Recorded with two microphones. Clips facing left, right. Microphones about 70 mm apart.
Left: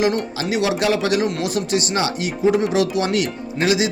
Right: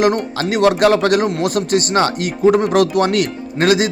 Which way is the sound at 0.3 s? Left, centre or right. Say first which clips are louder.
Right 6 dB; right.